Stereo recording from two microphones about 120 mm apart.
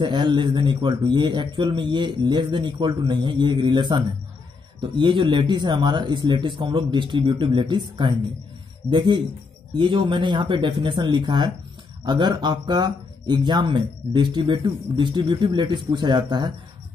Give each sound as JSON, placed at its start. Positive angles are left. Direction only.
{"t": 0.0, "sound": "speech", "side_deg": -40}